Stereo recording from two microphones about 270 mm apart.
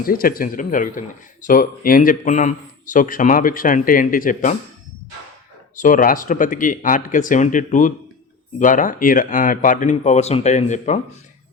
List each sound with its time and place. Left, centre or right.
0.0 s speech: left
5.7 s speech: left